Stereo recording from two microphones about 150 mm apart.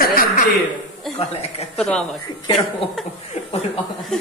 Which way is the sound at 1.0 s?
Centre (ahead or behind).